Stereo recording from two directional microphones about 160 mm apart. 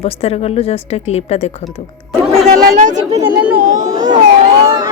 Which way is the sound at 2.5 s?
50° right (ahead or behind).